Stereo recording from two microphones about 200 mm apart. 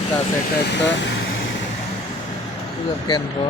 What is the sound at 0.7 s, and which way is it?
Speech, 60° left (ahead or behind).